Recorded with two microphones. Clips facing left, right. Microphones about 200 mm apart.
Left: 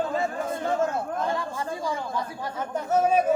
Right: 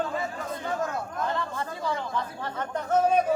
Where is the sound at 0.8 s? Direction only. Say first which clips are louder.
Left 4 dB; 25° left (ahead or behind).